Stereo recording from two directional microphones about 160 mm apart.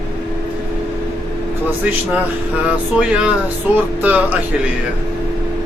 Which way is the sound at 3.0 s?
5° right (ahead or behind).